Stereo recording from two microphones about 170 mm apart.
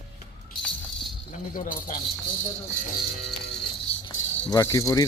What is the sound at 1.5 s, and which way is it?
Speech, 55° left (ahead or behind).